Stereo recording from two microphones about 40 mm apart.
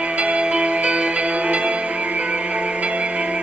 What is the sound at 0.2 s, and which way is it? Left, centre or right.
Music, right.